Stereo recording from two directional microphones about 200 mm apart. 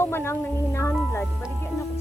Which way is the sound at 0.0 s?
10° left (ahead or behind).